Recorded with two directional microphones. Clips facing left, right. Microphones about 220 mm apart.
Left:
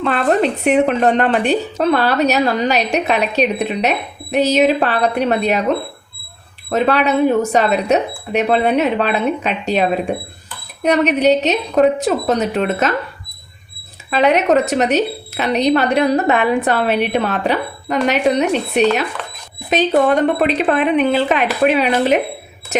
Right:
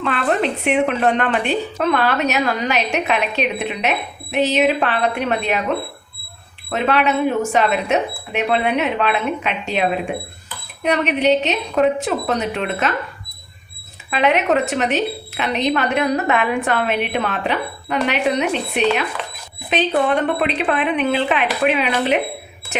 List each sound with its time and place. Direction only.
0.0 s a woman's voice: 40° left (ahead or behind)
6.7 s a woman's voice: 40° left (ahead or behind)
14.1 s a woman's voice: 40° left (ahead or behind)